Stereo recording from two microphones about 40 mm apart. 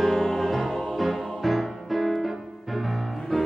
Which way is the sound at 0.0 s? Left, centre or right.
Centre.